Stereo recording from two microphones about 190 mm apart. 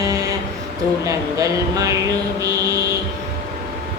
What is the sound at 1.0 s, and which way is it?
Speech, 20° right (ahead or behind).